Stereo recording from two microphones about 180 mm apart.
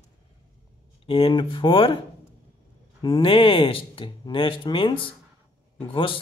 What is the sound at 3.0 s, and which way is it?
Speech, 30° left (ahead or behind).